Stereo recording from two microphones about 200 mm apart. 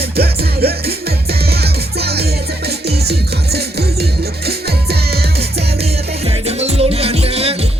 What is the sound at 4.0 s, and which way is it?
Music, 55° right (ahead or behind).